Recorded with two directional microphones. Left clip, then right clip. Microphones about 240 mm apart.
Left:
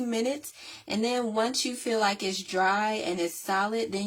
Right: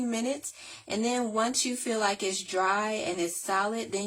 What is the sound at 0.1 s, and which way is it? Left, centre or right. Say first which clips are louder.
Speech: left 2 dB; left.